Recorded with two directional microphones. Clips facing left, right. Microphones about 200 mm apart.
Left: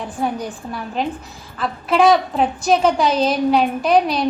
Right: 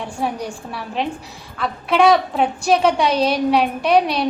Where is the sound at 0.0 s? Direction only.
Centre (ahead or behind).